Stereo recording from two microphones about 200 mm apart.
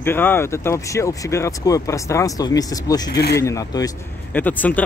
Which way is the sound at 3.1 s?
50° left (ahead or behind).